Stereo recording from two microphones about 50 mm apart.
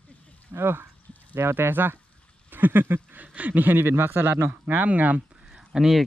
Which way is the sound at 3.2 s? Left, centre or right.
Right.